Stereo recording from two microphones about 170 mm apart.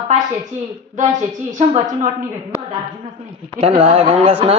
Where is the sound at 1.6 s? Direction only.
45° right (ahead or behind).